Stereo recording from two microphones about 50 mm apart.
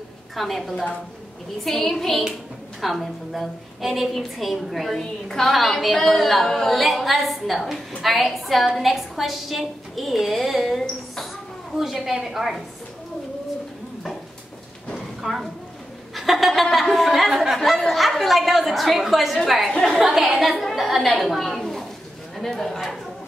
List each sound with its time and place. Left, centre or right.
0.4 s a woman's voice: centre
5.5 s a woman's voice: centre
15.0 s a sound: centre
16.9 s a woman's voice: centre